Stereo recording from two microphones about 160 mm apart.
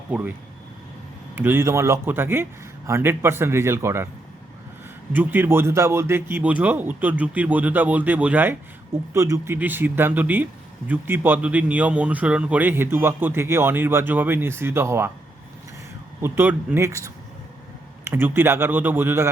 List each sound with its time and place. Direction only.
0.1 s speech: 10° right (ahead or behind)
1.4 s speech: 15° right (ahead or behind)
5.1 s speech: 10° right (ahead or behind)
16.2 s speech: 15° right (ahead or behind)